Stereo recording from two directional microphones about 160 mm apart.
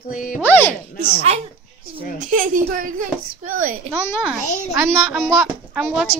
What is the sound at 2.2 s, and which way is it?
A child's voice, 55° right (ahead or behind).